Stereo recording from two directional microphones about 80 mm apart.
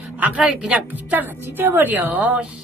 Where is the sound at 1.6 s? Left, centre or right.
Right.